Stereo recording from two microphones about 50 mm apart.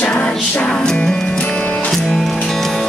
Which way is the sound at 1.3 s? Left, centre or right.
Left.